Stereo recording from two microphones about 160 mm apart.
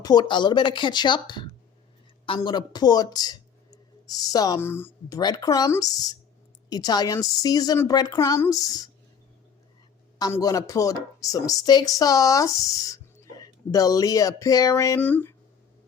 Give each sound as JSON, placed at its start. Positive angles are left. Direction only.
{"t": 0.0, "sound": "speech", "side_deg": 25}
{"t": 10.2, "sound": "speech", "side_deg": 25}